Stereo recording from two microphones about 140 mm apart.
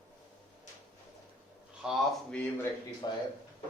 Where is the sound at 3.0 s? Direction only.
30° left (ahead or behind).